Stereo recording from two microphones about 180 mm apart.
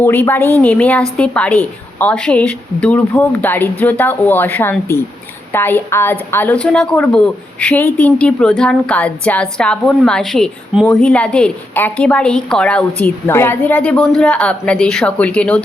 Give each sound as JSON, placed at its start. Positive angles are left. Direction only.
{"t": 0.0, "sound": "a woman's voice", "side_deg": 10}